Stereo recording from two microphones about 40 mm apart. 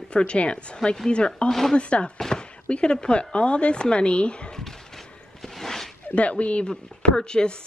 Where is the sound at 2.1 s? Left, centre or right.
Centre.